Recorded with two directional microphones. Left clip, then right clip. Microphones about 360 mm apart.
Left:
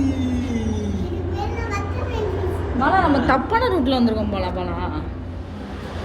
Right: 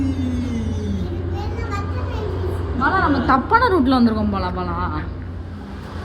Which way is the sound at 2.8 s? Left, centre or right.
Centre.